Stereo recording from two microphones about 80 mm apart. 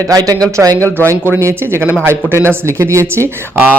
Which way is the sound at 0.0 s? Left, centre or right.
Right.